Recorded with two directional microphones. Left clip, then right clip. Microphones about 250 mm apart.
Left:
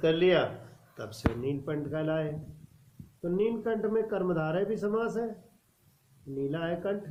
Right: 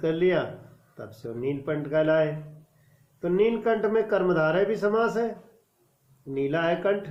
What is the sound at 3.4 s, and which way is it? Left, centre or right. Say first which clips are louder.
Speech: right 7 dB; right.